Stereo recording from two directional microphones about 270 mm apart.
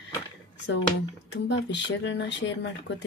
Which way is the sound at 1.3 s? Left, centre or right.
Left.